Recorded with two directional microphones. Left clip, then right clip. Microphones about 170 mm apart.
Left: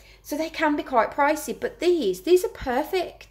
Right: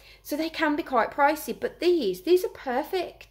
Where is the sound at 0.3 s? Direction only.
10° right (ahead or behind).